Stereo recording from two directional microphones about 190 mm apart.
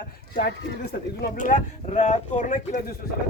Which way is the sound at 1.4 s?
40° left (ahead or behind).